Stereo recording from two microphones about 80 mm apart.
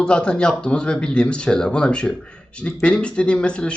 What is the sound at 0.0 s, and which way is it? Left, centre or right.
Speech, centre.